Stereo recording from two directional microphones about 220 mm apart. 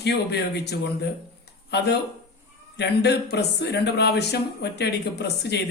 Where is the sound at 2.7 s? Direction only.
50° left (ahead or behind).